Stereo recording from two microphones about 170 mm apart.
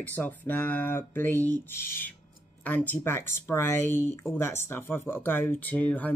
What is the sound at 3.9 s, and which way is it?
Speech, 45° left (ahead or behind).